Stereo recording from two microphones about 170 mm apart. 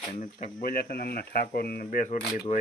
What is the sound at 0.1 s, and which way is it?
Speech, 50° left (ahead or behind).